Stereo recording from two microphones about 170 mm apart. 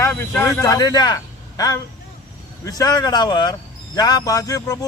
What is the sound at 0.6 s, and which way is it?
A man's voice, 20° left (ahead or behind).